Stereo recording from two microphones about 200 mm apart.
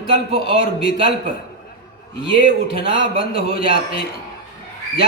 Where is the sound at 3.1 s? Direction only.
50° left (ahead or behind).